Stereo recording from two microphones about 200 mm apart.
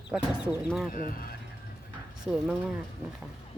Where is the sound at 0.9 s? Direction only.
45° left (ahead or behind).